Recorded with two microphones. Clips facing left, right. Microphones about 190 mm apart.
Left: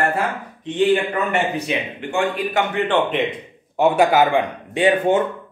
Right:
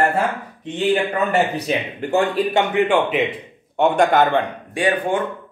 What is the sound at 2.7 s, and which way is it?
Speech, 10° right (ahead or behind).